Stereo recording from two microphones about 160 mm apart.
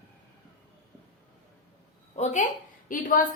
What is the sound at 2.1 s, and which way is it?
A woman's voice, 50° left (ahead or behind).